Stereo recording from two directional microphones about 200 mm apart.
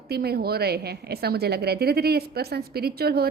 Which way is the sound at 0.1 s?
50° right (ahead or behind).